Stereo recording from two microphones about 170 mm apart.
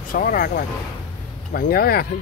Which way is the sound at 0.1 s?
55° left (ahead or behind).